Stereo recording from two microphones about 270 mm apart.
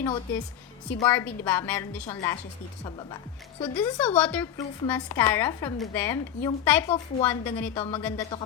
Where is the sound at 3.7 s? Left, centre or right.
Centre.